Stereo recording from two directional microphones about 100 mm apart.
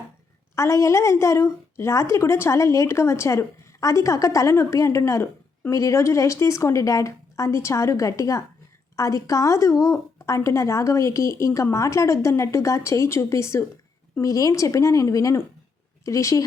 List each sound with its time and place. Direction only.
0.5 s a woman's voice: 30° left (ahead or behind)